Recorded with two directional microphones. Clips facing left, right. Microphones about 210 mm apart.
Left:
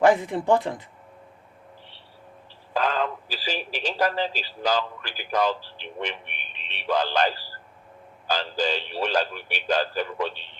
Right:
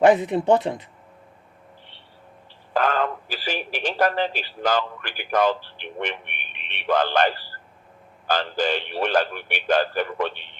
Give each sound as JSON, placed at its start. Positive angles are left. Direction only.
{"t": 0.0, "sound": "speech", "side_deg": -20}
{"t": 2.7, "sound": "speech", "side_deg": -55}